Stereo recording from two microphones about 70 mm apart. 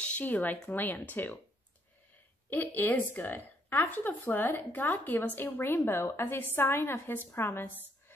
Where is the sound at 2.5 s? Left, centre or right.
Left.